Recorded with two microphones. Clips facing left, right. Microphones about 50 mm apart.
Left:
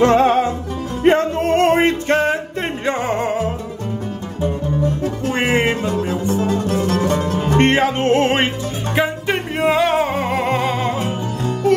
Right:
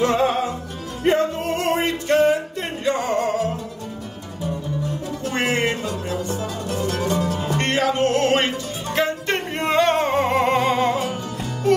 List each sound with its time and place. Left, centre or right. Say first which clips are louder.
0.0 s music: left 6 dB; left
5.3 s music: left 4 dB; left
8.9 s music: left 2 dB; centre